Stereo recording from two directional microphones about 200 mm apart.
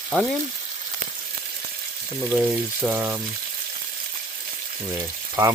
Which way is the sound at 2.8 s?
10° right (ahead or behind).